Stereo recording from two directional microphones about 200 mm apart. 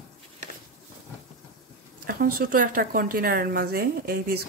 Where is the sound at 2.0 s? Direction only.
45° right (ahead or behind).